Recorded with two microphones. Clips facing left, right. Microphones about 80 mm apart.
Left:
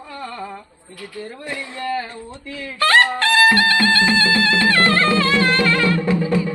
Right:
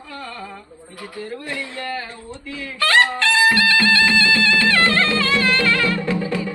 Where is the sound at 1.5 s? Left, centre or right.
Left.